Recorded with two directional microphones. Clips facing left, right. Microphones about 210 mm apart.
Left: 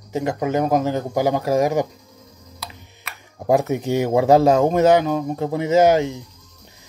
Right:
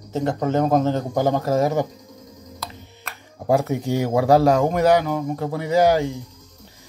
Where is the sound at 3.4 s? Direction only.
20° left (ahead or behind).